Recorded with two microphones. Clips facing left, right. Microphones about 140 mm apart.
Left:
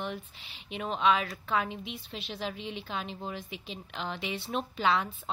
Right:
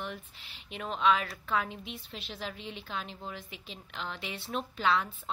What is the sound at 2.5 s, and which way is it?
Speech, 85° left.